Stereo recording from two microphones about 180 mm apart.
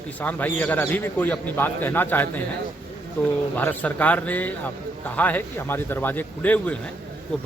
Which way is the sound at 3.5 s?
10° left (ahead or behind).